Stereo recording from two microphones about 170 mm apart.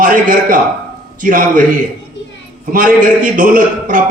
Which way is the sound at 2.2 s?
90° left.